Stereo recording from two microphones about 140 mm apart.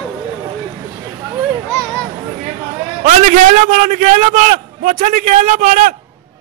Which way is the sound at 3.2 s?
65° right (ahead or behind).